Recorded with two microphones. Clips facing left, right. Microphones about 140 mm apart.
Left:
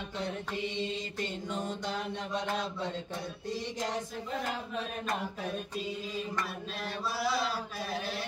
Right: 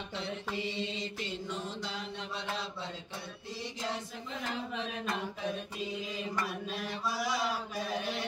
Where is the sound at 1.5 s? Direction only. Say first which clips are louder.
Left 4 dB; 50° left (ahead or behind).